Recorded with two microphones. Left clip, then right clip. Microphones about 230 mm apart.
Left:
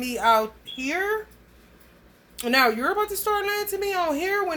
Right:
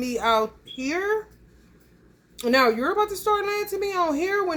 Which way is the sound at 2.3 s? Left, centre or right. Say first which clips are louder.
Right 1 dB; centre.